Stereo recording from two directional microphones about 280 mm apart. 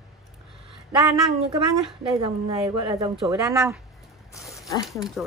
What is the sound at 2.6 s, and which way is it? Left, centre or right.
Speech, centre.